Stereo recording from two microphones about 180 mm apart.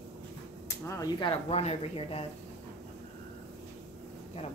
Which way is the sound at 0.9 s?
20° left (ahead or behind).